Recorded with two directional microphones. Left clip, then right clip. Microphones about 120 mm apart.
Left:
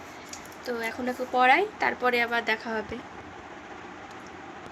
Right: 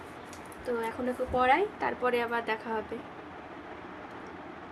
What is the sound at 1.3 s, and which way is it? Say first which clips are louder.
A woman's voice: left 5 dB; 15° left (ahead or behind).